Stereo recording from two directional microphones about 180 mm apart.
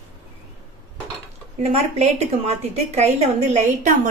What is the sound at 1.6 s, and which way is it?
A woman's voice, 35° right (ahead or behind).